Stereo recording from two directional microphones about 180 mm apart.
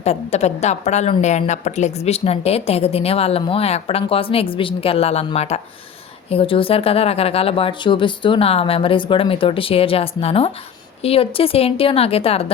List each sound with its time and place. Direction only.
0.0 s a woman's voice: 35° left (ahead or behind)